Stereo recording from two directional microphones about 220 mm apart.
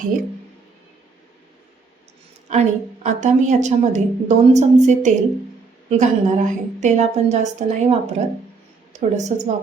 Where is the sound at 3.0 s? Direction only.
35° right (ahead or behind).